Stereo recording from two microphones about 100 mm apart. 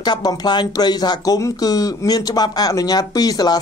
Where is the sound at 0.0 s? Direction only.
45° left (ahead or behind).